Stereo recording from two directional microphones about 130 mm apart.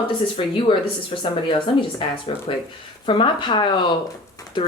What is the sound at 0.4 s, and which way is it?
Speech, 45° left (ahead or behind).